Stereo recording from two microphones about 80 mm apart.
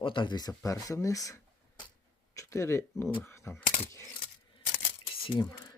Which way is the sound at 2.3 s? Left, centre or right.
Left.